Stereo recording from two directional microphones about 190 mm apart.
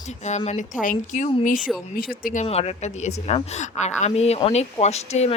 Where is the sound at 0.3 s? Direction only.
40° left (ahead or behind).